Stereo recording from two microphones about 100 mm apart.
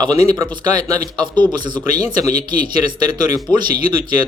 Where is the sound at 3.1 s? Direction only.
45° right (ahead or behind).